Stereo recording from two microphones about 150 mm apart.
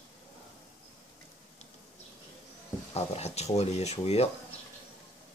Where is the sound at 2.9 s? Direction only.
45° left (ahead or behind).